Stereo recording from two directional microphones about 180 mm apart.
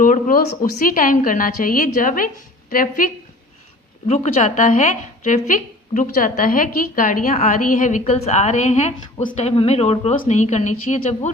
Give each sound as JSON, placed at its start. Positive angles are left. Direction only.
{"t": 0.0, "sound": "a woman's voice", "side_deg": 50}
{"t": 4.0, "sound": "a woman's voice", "side_deg": 40}